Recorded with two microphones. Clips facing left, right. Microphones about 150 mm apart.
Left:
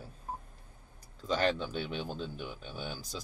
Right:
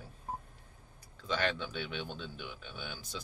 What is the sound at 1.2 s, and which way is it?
Speech, 40° left (ahead or behind).